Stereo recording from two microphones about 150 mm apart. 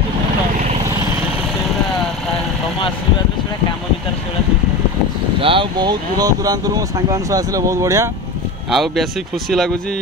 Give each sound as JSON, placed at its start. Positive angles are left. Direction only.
{"t": 5.4, "sound": "speech", "side_deg": -35}
{"t": 8.6, "sound": "speech", "side_deg": 0}